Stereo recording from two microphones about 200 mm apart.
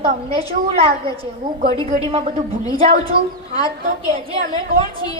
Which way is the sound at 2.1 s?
30° right (ahead or behind).